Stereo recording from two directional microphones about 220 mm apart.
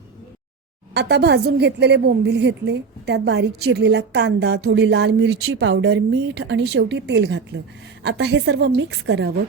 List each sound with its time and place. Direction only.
0.9 s a woman's voice: 50° right (ahead or behind)